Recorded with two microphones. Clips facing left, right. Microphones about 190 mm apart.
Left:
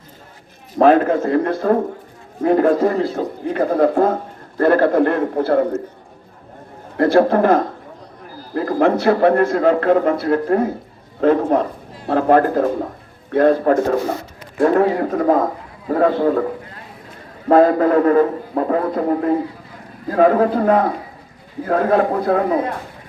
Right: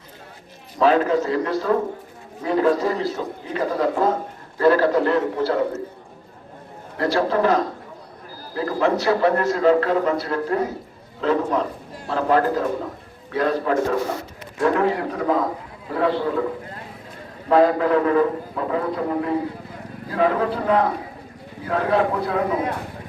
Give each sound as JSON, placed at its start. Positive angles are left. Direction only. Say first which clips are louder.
{"t": 0.8, "sound": "a man's voice", "louder": "left 5 dB", "side_deg": 50}
{"t": 6.9, "sound": "a man's voice", "louder": "left 7 dB", "side_deg": 50}
{"t": 17.5, "sound": "a man's voice", "louder": "left 4 dB", "side_deg": 45}